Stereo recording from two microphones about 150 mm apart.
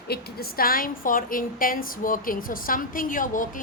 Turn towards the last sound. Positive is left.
turn(degrees=60)  # may be behind; listen again after turning